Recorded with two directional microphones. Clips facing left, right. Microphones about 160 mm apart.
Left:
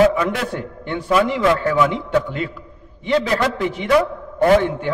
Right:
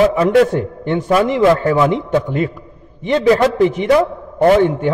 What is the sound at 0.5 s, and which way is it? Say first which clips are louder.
A man's voice: right 8 dB; 45° right (ahead or behind).